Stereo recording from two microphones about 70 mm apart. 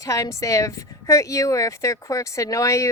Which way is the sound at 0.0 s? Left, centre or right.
Left.